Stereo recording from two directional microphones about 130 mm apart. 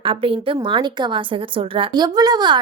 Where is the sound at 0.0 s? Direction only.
45° right (ahead or behind).